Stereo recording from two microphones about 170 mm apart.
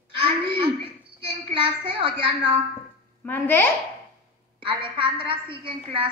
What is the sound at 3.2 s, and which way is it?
Speech, 10° left (ahead or behind).